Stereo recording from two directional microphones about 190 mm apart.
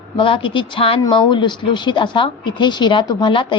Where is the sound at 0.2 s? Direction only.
25° left (ahead or behind).